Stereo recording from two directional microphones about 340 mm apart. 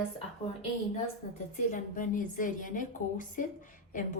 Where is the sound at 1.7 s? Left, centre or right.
Left.